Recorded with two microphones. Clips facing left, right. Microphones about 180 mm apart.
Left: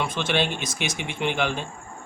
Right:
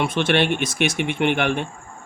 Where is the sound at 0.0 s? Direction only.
65° right (ahead or behind).